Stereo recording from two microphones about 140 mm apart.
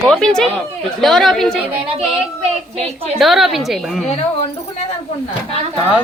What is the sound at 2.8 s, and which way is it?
Speech, 45° right (ahead or behind).